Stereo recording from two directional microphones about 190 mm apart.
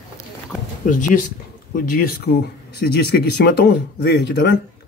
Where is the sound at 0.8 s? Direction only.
45° left (ahead or behind); by 4.5 s 60° left (ahead or behind).